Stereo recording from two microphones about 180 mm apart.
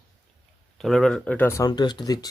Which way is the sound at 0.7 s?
Centre (ahead or behind).